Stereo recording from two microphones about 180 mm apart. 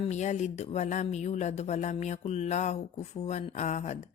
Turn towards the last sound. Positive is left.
turn(degrees=40)  # may be behind; listen again after turning